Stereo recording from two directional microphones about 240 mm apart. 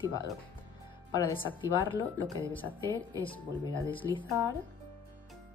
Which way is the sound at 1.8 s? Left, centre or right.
Centre.